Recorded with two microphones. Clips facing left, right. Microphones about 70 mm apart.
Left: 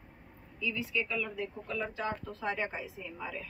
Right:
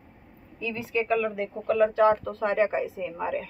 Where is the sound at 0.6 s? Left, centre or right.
Right.